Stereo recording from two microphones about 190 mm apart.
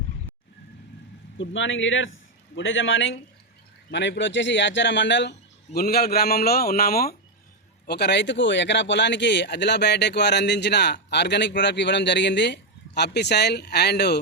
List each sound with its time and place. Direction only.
1.4 s speech: 85° left
3.9 s speech: 70° left (ahead or behind)
5.7 s speech: 55° left (ahead or behind)